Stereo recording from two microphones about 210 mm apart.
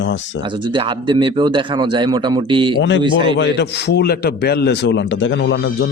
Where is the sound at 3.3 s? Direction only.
55° left (ahead or behind).